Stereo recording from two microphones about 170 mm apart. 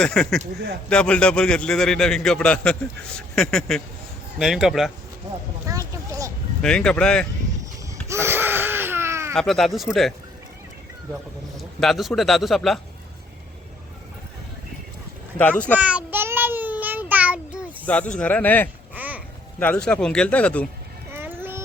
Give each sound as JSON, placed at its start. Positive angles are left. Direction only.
{"t": 0.0, "sound": "a man's voice", "side_deg": 5}
{"t": 5.6, "sound": "a sound", "side_deg": -20}
{"t": 6.6, "sound": "a man's voice", "side_deg": 5}
{"t": 8.0, "sound": "a sound", "side_deg": -15}
{"t": 9.3, "sound": "a man's voice", "side_deg": 5}
{"t": 15.4, "sound": "speech", "side_deg": 10}
{"t": 15.8, "sound": "child singing", "side_deg": -10}
{"t": 17.8, "sound": "speech", "side_deg": 5}
{"t": 18.9, "sound": "babbling", "side_deg": -10}
{"t": 19.5, "sound": "speech", "side_deg": 10}
{"t": 21.1, "sound": "a sound", "side_deg": -15}